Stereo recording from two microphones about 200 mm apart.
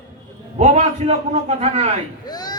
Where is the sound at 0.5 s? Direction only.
30° right (ahead or behind).